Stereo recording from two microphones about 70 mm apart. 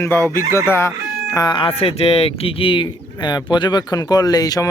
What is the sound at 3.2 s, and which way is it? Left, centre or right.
Speech, left.